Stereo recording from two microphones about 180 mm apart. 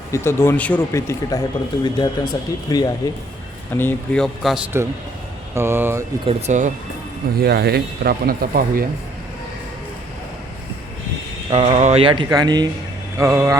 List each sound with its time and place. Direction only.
0.1 s speech: 15° left (ahead or behind)
3.8 s speech: 10° left (ahead or behind)
5.5 s speech: 15° right (ahead or behind)
6.2 s speech: 40° right (ahead or behind)
7.3 s speech: 60° right (ahead or behind)
11.5 s speech: 40° right (ahead or behind); by 13.6 s 15° right (ahead or behind)